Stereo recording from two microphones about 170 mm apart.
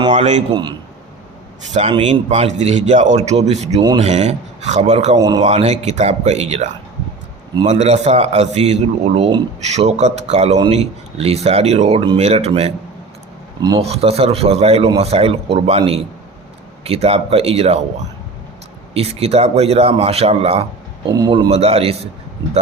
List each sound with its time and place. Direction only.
0.1 s a man's voice: 45° right (ahead or behind)
1.9 s a man's voice: 35° right (ahead or behind)
5.1 s speech: 25° right (ahead or behind)
5.4 s a man's voice: 40° right (ahead or behind)
13.6 s speech: 25° right (ahead or behind)
13.8 s a man's voice: 40° right (ahead or behind)
18.9 s a man's voice: 35° right (ahead or behind)
21.1 s a man's voice: 25° right (ahead or behind)